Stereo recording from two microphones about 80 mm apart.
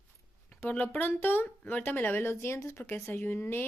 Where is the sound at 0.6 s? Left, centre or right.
Left.